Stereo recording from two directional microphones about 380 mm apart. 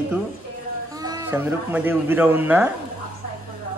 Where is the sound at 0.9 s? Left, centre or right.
Centre.